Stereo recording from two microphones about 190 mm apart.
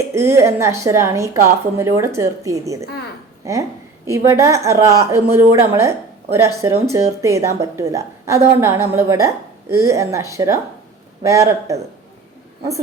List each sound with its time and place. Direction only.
0.1 s a woman's voice: 15° right (ahead or behind)